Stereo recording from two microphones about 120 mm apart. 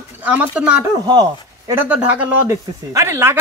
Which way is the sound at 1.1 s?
35° right (ahead or behind).